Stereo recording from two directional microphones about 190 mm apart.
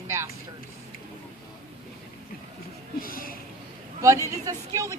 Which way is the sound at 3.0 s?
50° left (ahead or behind).